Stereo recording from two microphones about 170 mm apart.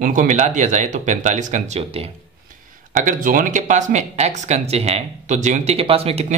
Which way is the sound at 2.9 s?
50° right (ahead or behind).